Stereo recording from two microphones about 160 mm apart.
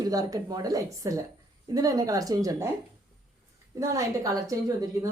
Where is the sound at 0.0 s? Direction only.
25° right (ahead or behind).